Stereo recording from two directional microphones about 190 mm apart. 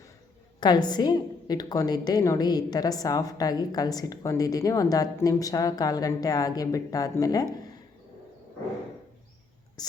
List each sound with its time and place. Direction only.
0.6 s a woman's voice: 20° left (ahead or behind)